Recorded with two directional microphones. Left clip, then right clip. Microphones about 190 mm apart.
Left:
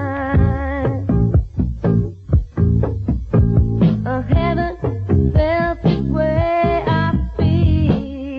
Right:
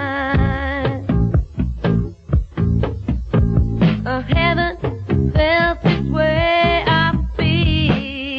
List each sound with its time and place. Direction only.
0.0 s music: 30° left (ahead or behind)
3.8 s music: 35° left (ahead or behind)
5.3 s music: 40° left (ahead or behind)